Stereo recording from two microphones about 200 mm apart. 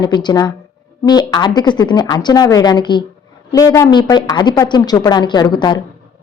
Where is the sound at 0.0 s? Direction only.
20° left (ahead or behind).